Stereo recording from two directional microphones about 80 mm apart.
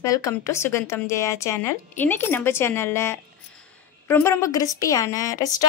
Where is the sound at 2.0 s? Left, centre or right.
Left.